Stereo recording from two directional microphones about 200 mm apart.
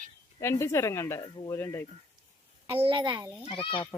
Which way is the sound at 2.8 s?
25° right (ahead or behind).